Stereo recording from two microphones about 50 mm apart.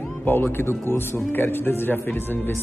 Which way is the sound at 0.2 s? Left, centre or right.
Left.